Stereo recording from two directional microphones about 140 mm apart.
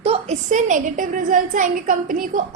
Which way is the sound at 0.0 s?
45° right (ahead or behind).